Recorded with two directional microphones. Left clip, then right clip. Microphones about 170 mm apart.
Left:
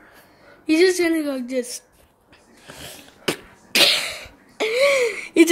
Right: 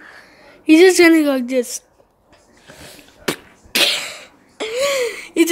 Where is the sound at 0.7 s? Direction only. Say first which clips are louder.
Right 8 dB; 35° right (ahead or behind).